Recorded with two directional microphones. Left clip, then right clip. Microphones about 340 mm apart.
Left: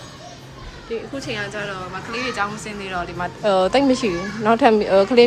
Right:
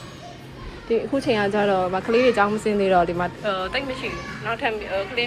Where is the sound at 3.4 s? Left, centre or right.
Centre.